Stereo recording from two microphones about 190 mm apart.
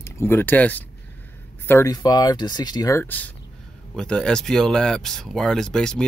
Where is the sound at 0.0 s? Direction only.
15° left (ahead or behind).